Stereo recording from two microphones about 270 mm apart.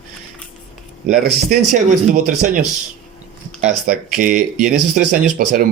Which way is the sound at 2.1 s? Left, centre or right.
Right.